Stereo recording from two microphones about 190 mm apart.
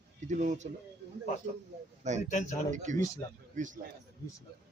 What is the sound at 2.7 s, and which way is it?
Speech, 40° right (ahead or behind).